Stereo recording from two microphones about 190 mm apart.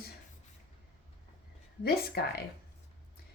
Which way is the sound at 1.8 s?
55° left (ahead or behind).